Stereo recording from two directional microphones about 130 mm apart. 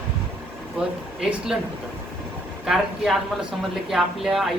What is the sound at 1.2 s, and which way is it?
Speech, 5° right (ahead or behind).